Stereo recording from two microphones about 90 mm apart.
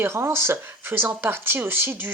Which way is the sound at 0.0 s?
30° right (ahead or behind).